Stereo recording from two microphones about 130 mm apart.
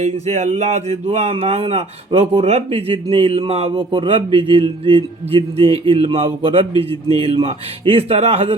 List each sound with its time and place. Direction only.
0.0 s speech: 65° right (ahead or behind)